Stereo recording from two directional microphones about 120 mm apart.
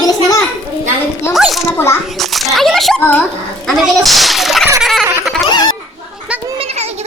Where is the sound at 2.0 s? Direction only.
Centre (ahead or behind).